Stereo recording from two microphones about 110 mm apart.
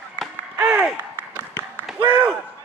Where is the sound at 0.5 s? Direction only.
15° right (ahead or behind).